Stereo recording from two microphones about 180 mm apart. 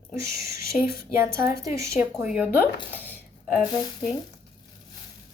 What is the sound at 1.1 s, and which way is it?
Speech, 15° right (ahead or behind).